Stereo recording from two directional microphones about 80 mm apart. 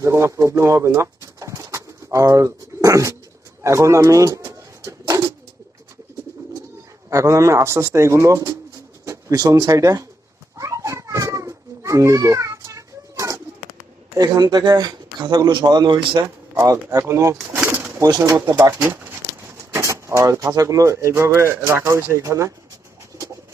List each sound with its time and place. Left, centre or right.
0.0 s pigeon: right
3.6 s a man's voice: right
4.8 s bird: right
7.1 s a man's voice: right
10.6 s a sound: right
14.2 s speech: right
16.2 s a man's voice: right
17.6 s pigeon: right
18.2 s a man's voice: right
18.8 s a sound: right
20.5 s a man's voice: right